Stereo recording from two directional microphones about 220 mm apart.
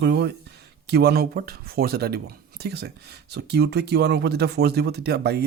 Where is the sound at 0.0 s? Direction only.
50° right (ahead or behind).